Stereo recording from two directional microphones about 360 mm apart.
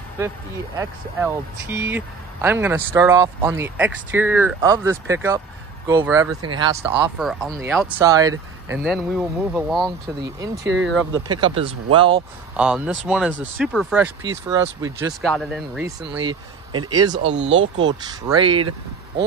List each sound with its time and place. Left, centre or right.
0.7 s speech: centre
7.8 s speech: centre
10.6 s speech: right
11.2 s speech: centre
17.2 s speech: right
18.2 s speech: centre